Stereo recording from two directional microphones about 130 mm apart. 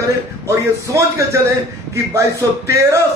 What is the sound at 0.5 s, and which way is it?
Speech, 20° right (ahead or behind).